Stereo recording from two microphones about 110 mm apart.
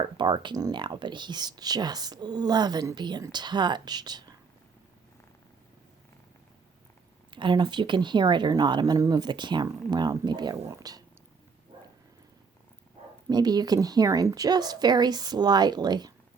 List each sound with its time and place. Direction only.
0.2 s speech: 45° right (ahead or behind)
7.3 s speech: 45° right (ahead or behind)
13.3 s speech: 35° right (ahead or behind)